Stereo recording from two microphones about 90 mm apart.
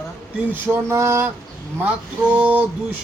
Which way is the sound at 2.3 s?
20° right (ahead or behind).